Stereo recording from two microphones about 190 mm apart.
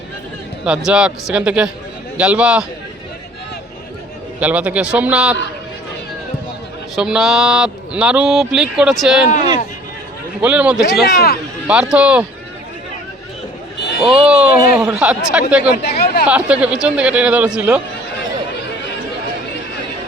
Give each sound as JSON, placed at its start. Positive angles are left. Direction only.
{"t": 0.6, "sound": "speech", "side_deg": -5}
{"t": 4.4, "sound": "speech", "side_deg": -5}
{"t": 6.9, "sound": "speech", "side_deg": 0}
{"t": 10.4, "sound": "speech", "side_deg": -5}
{"t": 11.0, "sound": "speech", "side_deg": 55}
{"t": 11.7, "sound": "speech", "side_deg": -5}
{"t": 14.0, "sound": "speech", "side_deg": -5}
{"t": 15.8, "sound": "speech", "side_deg": 60}
{"t": 16.2, "sound": "speech", "side_deg": -5}